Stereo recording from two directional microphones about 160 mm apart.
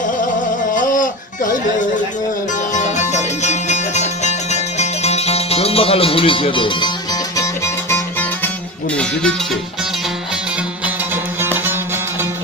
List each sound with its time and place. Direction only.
0.8 s music: 55° left (ahead or behind)
2.7 s music: 50° left (ahead or behind); by 6.9 s 30° left (ahead or behind)
7.3 s music: 15° left (ahead or behind)